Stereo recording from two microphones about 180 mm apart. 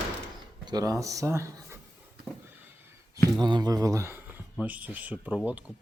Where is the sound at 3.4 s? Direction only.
20° right (ahead or behind).